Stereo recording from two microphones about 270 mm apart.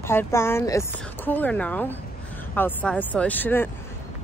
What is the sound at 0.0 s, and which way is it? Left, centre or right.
A woman's voice, centre.